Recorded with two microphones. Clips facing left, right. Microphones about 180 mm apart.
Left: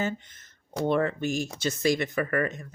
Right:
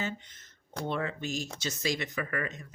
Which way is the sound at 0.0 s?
50° left (ahead or behind).